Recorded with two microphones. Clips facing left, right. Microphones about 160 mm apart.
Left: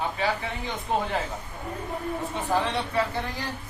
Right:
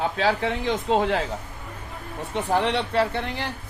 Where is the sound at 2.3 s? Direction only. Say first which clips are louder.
Right 5 dB; 65° right (ahead or behind).